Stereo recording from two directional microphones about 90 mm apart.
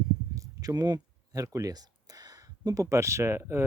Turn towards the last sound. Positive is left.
turn(degrees=-30)  # may be behind; listen again after turning